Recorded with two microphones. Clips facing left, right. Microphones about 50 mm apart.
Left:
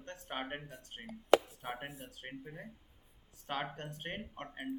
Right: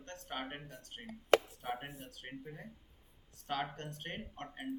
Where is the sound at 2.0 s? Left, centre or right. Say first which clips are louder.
Even; centre.